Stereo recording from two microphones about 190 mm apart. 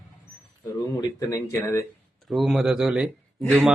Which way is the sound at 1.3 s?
15° left (ahead or behind).